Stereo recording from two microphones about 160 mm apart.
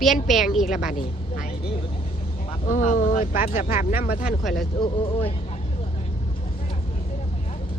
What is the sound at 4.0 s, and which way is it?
Speech, 65° left (ahead or behind).